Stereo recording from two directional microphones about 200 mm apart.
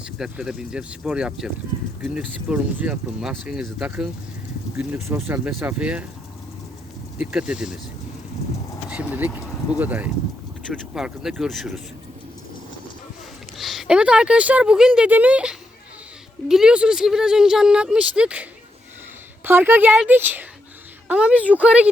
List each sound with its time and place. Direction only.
0.0 s speech: 5° right (ahead or behind)
7.2 s speech: 5° right (ahead or behind)
8.9 s speech: 5° right (ahead or behind)
13.6 s speech: centre (ahead or behind)
19.5 s speech: 10° right (ahead or behind)